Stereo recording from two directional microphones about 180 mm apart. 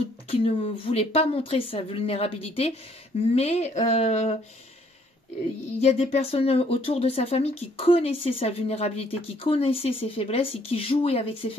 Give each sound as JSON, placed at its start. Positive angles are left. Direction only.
{"t": 0.3, "sound": "speech", "side_deg": 30}
{"t": 5.8, "sound": "speech", "side_deg": 35}